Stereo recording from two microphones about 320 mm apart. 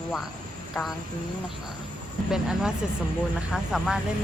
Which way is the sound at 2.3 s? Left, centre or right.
Centre.